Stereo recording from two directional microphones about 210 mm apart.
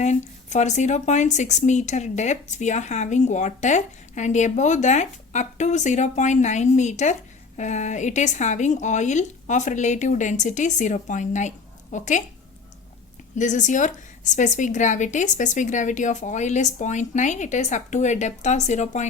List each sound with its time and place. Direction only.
0.0 s speech: 35° left (ahead or behind)
13.3 s speech: 35° left (ahead or behind)